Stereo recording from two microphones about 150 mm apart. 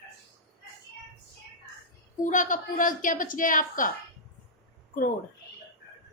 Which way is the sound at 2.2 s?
55° left (ahead or behind).